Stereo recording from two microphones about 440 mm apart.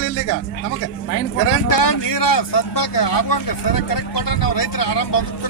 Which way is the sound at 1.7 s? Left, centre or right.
Left.